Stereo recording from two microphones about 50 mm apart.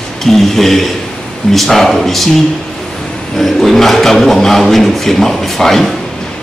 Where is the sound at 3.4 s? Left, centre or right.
Centre.